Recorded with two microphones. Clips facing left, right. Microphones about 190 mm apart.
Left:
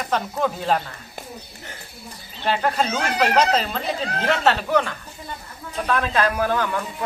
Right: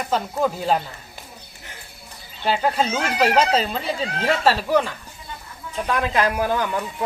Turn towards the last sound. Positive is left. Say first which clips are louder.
# even
turn(degrees=-15)  # may be behind; listen again after turning